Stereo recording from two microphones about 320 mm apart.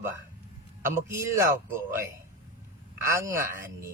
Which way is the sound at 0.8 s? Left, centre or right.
Centre.